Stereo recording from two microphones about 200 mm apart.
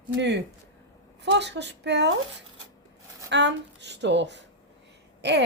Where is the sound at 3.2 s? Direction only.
60° right (ahead or behind).